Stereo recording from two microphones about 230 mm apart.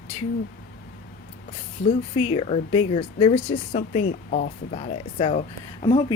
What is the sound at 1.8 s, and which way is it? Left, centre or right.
Speech, left.